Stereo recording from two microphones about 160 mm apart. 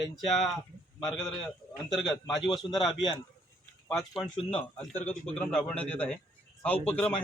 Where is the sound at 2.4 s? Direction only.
Centre (ahead or behind).